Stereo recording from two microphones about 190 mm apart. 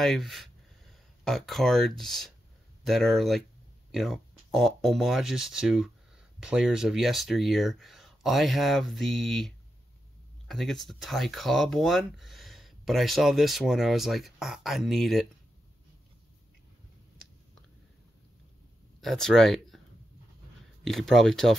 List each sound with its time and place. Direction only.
0.0 s speech: centre (ahead or behind)
10.5 s speech: centre (ahead or behind)
18.9 s speech: centre (ahead or behind)
20.8 s speech: centre (ahead or behind)